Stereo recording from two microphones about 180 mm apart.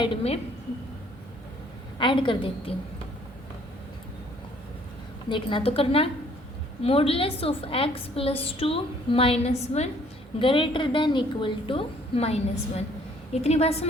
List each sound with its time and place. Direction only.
0.0 s a woman's voice: 30° left (ahead or behind)
2.0 s a woman's voice: 25° left (ahead or behind)
5.3 s a woman's voice: 30° left (ahead or behind)